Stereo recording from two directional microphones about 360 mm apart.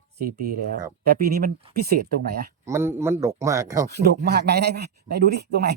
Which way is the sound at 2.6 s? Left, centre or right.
Centre.